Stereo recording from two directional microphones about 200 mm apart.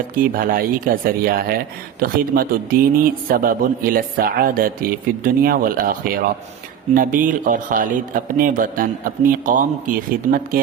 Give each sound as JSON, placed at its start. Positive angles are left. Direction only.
{"t": 0.2, "sound": "a man's voice", "side_deg": -45}